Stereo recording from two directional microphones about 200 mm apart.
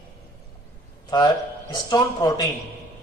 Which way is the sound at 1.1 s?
20° left (ahead or behind).